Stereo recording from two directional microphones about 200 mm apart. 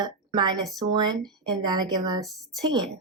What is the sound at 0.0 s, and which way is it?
Speech, 20° right (ahead or behind).